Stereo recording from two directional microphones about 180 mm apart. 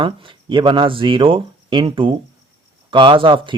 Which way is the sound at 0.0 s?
25° right (ahead or behind).